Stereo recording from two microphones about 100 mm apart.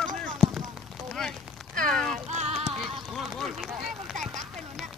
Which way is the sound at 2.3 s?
90° right.